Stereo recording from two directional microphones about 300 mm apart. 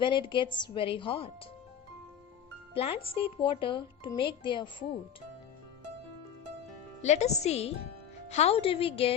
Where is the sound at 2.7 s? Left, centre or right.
Centre.